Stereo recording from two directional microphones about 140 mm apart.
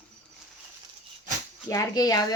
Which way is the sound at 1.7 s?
25° left (ahead or behind).